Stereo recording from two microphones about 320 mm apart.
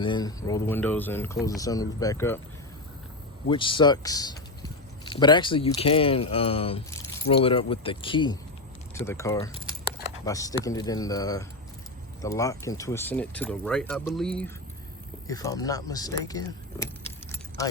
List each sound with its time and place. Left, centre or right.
0.0 s speech: centre
3.5 s speech: centre